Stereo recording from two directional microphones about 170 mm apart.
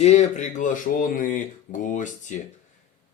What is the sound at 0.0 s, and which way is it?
Speech, 40° left (ahead or behind).